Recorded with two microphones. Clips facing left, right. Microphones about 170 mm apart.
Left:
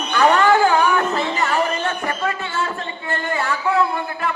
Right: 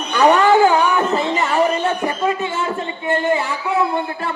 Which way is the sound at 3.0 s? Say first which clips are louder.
Right 5 dB; 20° right (ahead or behind).